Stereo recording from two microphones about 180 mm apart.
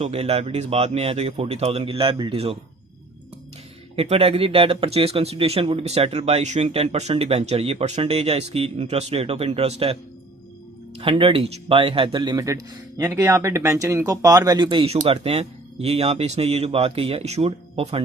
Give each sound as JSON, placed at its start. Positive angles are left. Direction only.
{"t": 0.0, "sound": "speech", "side_deg": -35}
{"t": 3.9, "sound": "speech", "side_deg": -35}